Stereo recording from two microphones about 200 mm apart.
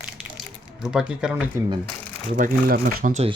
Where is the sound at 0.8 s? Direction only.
5° right (ahead or behind).